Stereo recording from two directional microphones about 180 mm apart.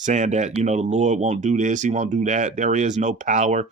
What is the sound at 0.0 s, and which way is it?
Speech, 40° right (ahead or behind).